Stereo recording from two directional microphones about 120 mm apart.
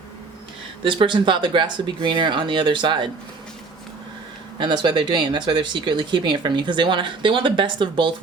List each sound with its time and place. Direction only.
0.9 s speech: 40° right (ahead or behind)
4.6 s speech: 40° right (ahead or behind)